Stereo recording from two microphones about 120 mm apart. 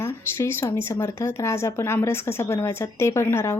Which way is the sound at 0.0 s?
20° left (ahead or behind).